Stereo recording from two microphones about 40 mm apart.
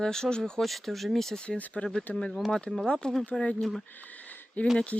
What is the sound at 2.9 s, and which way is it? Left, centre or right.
Speech, left.